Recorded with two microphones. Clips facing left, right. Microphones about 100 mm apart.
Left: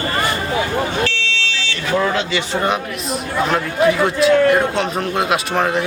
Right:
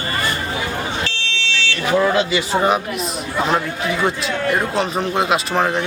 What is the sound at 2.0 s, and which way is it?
Speech, 5° right (ahead or behind).